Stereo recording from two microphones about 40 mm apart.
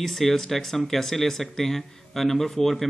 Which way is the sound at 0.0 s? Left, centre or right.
Centre.